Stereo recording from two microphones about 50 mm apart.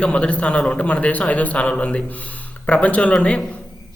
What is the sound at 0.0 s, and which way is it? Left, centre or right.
A man's voice, left.